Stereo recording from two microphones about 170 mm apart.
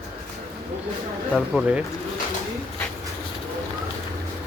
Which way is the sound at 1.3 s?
5° right (ahead or behind).